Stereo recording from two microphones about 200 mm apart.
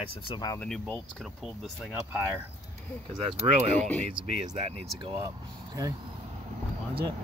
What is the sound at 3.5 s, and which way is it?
Speech, 35° right (ahead or behind).